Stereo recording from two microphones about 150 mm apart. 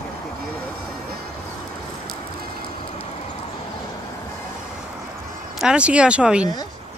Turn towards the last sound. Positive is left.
turn(degrees=-5)  # may be behind; listen again after turning